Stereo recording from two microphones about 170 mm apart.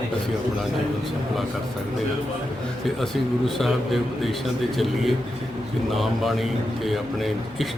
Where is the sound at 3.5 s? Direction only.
Centre (ahead or behind).